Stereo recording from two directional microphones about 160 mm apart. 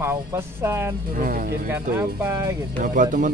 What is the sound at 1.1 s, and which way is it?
Speech, 65° right (ahead or behind).